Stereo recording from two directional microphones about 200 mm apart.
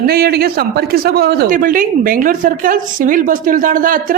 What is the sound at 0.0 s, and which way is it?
Speech, 50° right (ahead or behind).